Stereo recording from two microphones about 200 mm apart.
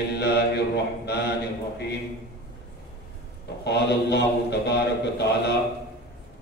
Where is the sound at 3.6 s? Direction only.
55° left (ahead or behind).